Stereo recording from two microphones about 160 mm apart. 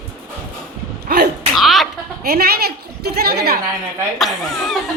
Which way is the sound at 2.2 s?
75° right (ahead or behind).